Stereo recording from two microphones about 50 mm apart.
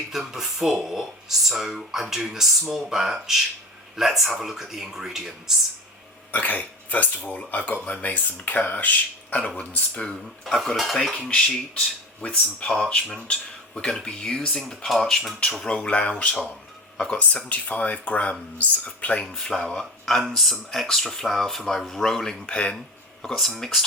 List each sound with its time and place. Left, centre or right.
0.1 s speech: centre
6.3 s speech: left
9.9 s speech: centre
10.4 s speech: centre
11.3 s speech: left
19.2 s speech: centre
19.8 s speech: centre
22.4 s speech: left
23.2 s speech: centre